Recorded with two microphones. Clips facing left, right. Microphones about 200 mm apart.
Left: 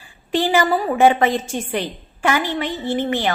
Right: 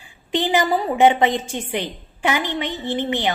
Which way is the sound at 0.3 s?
20° right (ahead or behind).